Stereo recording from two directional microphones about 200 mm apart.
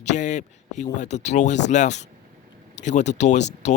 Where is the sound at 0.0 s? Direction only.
35° left (ahead or behind).